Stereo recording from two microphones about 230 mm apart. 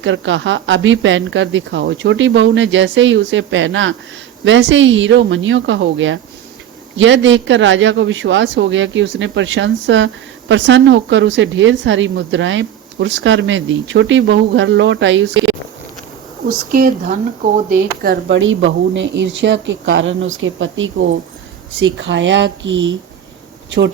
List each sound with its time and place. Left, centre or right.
0.0 s a woman's voice: right
16.7 s speech: right
18.3 s a woman's voice: right